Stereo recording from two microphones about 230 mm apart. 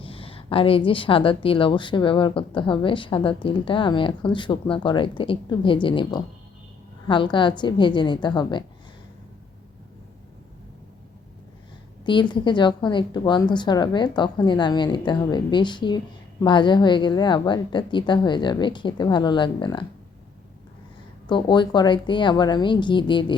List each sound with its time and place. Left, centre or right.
0.0 s a woman's voice: left
12.0 s a woman's voice: centre
21.2 s a woman's voice: centre